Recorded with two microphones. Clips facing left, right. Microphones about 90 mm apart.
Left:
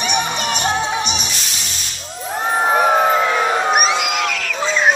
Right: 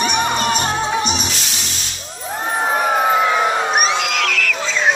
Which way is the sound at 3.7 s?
10° left (ahead or behind).